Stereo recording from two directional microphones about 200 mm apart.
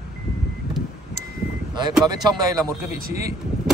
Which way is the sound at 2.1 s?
20° right (ahead or behind).